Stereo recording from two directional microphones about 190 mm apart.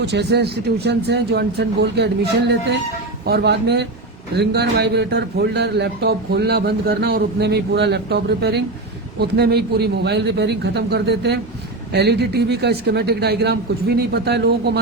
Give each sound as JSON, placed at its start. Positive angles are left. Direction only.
{"t": 0.1, "sound": "a man's voice", "side_deg": -60}
{"t": 3.2, "sound": "a man's voice", "side_deg": -60}